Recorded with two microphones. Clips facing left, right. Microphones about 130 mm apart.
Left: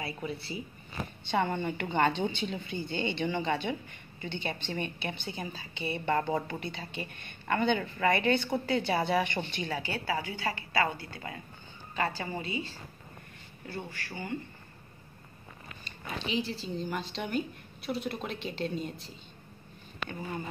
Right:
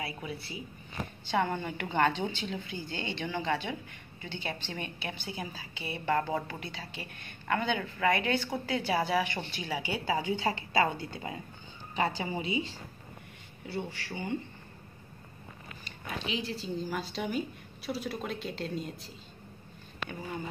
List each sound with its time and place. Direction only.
0.0 s a woman's voice: 5° right (ahead or behind)
13.7 s a woman's voice: 20° right (ahead or behind)
16.3 s a woman's voice: centre (ahead or behind)